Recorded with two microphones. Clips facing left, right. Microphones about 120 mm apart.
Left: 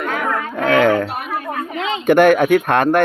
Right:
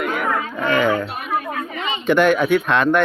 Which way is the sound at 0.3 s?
55° left (ahead or behind).